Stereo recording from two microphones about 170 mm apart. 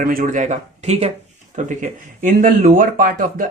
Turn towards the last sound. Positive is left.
turn(degrees=-55)  # may be behind; listen again after turning